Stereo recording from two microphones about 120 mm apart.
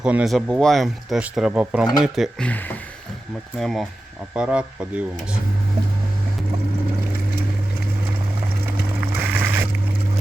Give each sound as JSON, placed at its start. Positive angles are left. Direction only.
{"t": 0.0, "sound": "speech", "side_deg": -10}
{"t": 2.4, "sound": "speech", "side_deg": 15}
{"t": 3.6, "sound": "speech", "side_deg": 0}
{"t": 4.4, "sound": "speech", "side_deg": -10}
{"t": 9.3, "sound": "boat", "side_deg": -15}